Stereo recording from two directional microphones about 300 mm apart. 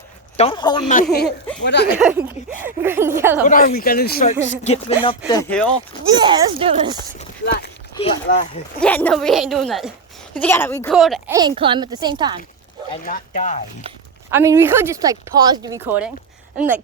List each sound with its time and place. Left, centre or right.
0.3 s speech: centre
1.6 s speech: left
2.0 s speech: centre
3.4 s speech: left
5.3 s speech: centre
6.1 s speech: centre
7.4 s speech: left
7.9 s speech: left
8.8 s speech: centre
11.3 s speech: centre
12.9 s speech: left
14.3 s speech: centre